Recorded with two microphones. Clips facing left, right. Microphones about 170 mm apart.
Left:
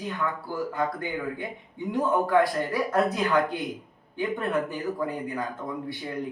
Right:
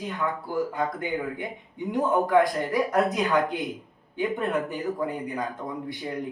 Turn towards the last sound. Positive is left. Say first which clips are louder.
# even
turn(degrees=-20)  # may be behind; listen again after turning